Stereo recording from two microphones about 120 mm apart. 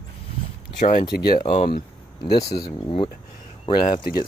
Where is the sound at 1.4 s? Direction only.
60° left (ahead or behind).